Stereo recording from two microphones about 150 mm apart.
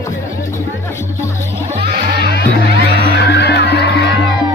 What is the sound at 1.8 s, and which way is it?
Music, 80° right.